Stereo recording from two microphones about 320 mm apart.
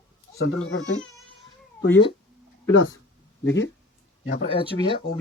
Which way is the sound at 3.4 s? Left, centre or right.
Left.